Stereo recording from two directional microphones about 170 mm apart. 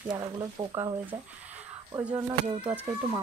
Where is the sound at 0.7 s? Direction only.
15° right (ahead or behind).